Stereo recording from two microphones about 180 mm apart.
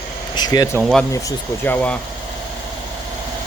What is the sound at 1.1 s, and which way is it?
Speech, 15° left (ahead or behind).